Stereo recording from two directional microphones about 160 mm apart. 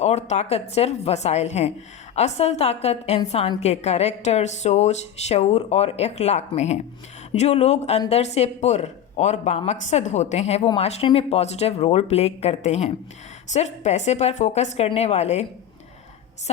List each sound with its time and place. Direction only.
0.0 s speech: 45° left (ahead or behind)